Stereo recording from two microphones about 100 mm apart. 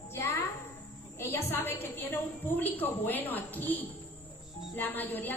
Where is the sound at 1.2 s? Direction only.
20° left (ahead or behind).